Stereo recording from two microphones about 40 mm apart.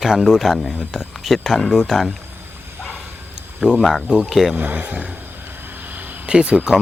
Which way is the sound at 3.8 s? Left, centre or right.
Centre.